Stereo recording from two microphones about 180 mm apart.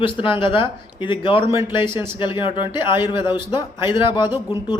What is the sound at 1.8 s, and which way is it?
Speech, 15° right (ahead or behind).